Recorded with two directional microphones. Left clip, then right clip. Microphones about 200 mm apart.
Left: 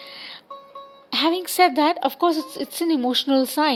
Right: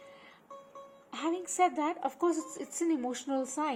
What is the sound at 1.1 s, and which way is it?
Speech, 55° left (ahead or behind).